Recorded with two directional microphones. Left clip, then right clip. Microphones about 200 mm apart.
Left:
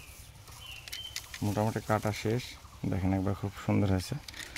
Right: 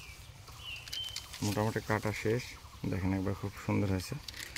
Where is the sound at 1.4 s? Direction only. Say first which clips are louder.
Left 2 dB; 40° left (ahead or behind).